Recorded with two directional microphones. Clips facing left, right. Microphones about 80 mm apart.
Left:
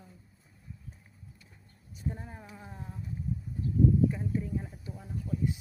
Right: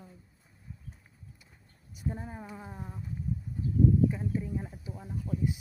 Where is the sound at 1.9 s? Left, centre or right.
Centre.